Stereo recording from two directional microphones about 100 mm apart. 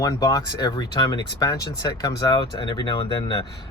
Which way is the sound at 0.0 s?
35° left (ahead or behind).